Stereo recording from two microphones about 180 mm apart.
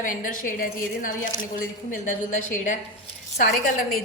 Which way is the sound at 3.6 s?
55° left (ahead or behind).